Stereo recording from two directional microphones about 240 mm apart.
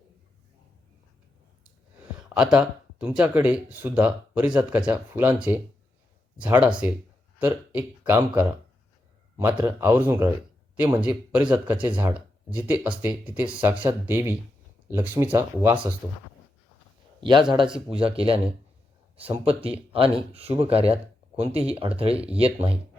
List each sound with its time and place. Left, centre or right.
2.3 s speech: centre
9.6 s speech: centre
17.2 s a man's voice: centre